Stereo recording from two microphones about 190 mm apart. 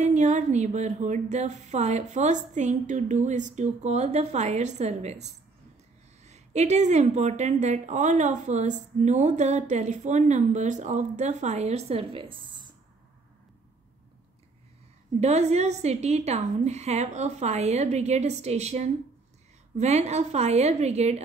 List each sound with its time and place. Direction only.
0.0 s a woman's voice: 40° right (ahead or behind)
15.1 s a woman's voice: 35° right (ahead or behind)